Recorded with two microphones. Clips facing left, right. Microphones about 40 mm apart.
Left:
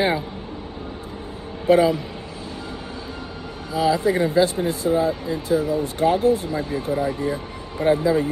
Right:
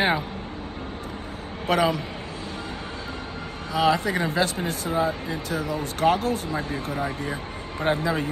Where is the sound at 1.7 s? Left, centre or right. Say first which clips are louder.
Left 6 dB; right.